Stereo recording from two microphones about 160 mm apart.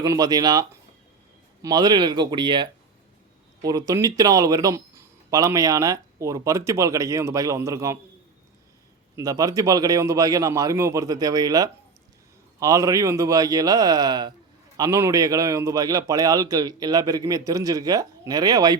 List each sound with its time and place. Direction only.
0.0 s speech: 25° right (ahead or behind)
1.6 s speech: 25° right (ahead or behind)
9.1 s speech: 20° right (ahead or behind)